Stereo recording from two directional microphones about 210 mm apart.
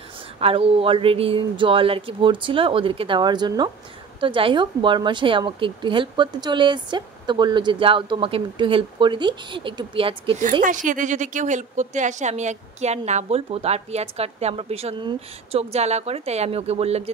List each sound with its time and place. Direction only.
0.4 s a woman's voice: 25° right (ahead or behind)
10.6 s a woman's voice: 40° right (ahead or behind)